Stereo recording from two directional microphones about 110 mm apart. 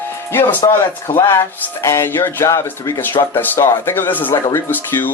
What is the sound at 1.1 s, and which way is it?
Speech, 25° left (ahead or behind).